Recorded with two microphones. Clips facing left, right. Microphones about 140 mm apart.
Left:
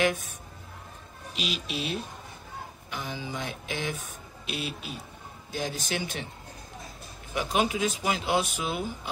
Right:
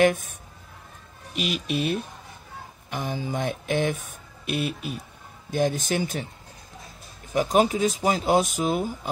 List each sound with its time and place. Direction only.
0.0 s speech: 50° right (ahead or behind)
1.3 s speech: 50° right (ahead or behind)
7.3 s speech: 40° right (ahead or behind)